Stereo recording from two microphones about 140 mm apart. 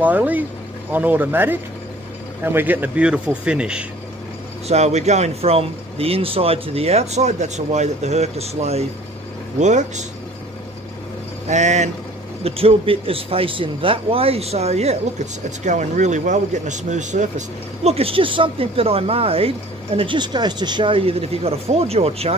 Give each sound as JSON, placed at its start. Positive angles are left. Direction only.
{"t": 0.0, "sound": "speech", "side_deg": -10}
{"t": 4.6, "sound": "speech", "side_deg": -50}
{"t": 11.4, "sound": "speech", "side_deg": -55}
{"t": 12.4, "sound": "speech", "side_deg": -45}
{"t": 17.8, "sound": "speech", "side_deg": -45}